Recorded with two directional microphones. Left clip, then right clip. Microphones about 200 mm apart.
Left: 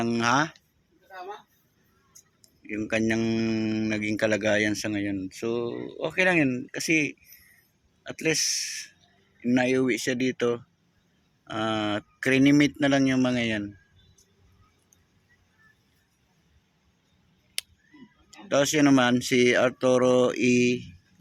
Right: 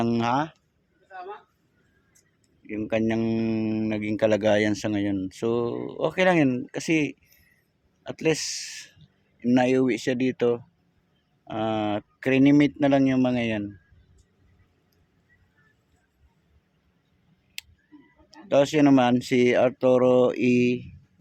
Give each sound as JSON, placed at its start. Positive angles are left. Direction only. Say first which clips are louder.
{"t": 0.0, "sound": "speech", "louder": "right 2 dB", "side_deg": -15}
{"t": 2.6, "sound": "speech", "louder": "right 1 dB", "side_deg": -10}
{"t": 17.6, "sound": "a sound", "louder": "left 4 dB", "side_deg": -10}
{"t": 18.3, "sound": "speech", "louder": "right 3 dB", "side_deg": -10}